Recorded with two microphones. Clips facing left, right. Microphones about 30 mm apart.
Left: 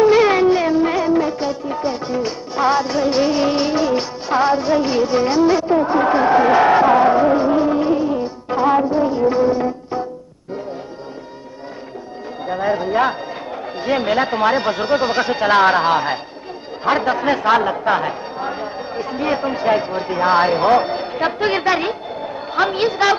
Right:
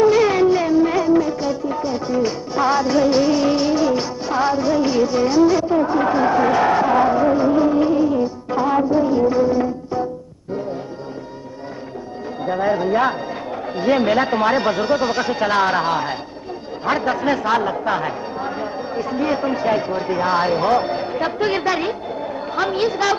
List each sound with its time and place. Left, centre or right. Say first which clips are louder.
0.0 s music: left 2 dB; left
12.4 s speech: right 1 dB; centre